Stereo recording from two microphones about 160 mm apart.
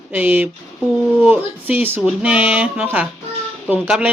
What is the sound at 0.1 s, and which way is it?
Speech, 10° right (ahead or behind).